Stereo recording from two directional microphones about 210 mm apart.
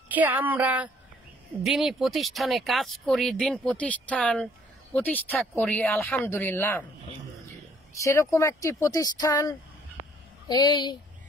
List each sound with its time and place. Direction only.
0.1 s speech: 10° right (ahead or behind); by 6.9 s 10° left (ahead or behind)
8.0 s speech: 15° left (ahead or behind)